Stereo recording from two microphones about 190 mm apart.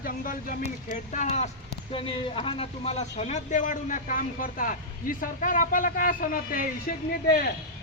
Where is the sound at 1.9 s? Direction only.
30° left (ahead or behind); by 6.6 s 45° left (ahead or behind).